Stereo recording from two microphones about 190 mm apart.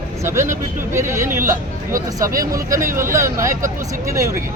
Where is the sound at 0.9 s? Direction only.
15° right (ahead or behind).